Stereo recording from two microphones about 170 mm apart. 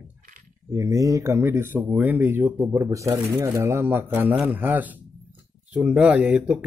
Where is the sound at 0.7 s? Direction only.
20° right (ahead or behind).